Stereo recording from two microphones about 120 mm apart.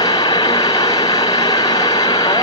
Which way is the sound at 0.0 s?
30° left (ahead or behind).